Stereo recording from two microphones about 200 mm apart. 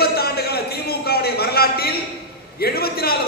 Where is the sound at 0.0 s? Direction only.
50° left (ahead or behind).